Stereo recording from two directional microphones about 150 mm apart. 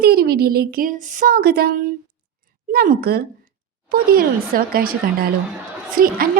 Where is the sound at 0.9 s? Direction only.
60° right (ahead or behind); by 1.7 s 90° right.